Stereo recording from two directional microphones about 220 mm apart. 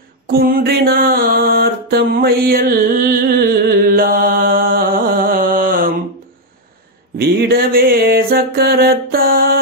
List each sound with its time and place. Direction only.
0.3 s mantra: 40° right (ahead or behind)
7.2 s mantra: 45° right (ahead or behind)